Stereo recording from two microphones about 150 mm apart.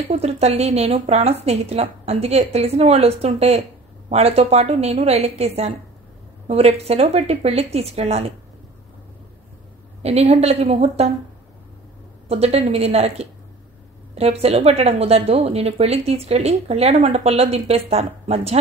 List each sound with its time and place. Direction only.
0.1 s speech: 45° right (ahead or behind)
10.0 s speech: 45° right (ahead or behind)
12.3 s speech: 45° right (ahead or behind)